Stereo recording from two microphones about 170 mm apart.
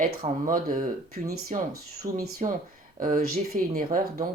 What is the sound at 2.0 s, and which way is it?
Speech, 55° right (ahead or behind).